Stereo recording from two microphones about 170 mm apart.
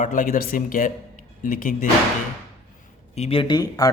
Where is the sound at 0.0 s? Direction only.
50° left (ahead or behind).